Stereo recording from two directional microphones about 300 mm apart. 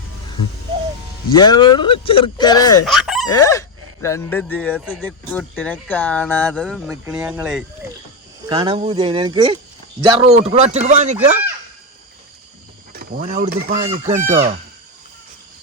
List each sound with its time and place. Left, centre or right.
1.3 s speech: centre
2.8 s chicken: centre
3.2 s speech: centre; by 11.3 s right
12.9 s speech: right